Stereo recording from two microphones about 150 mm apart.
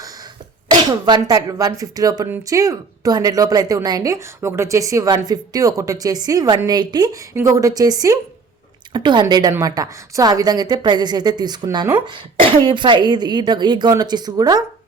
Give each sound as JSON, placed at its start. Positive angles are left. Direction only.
{"t": 0.7, "sound": "a woman's voice", "side_deg": -30}